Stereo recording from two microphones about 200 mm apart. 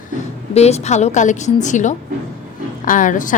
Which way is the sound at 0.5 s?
30° left (ahead or behind).